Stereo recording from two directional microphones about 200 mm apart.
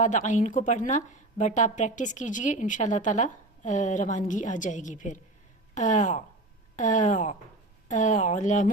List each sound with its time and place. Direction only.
0.0 s a woman's voice: 35° left (ahead or behind)